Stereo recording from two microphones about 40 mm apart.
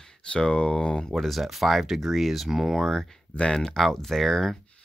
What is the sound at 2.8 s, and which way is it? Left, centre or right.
Speech, centre.